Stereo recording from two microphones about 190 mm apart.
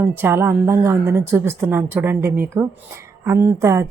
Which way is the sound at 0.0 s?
10° right (ahead or behind).